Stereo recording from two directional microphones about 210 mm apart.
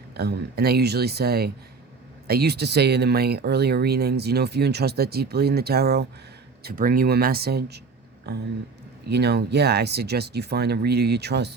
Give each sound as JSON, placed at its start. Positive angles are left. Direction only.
{"t": 0.2, "sound": "speech", "side_deg": -50}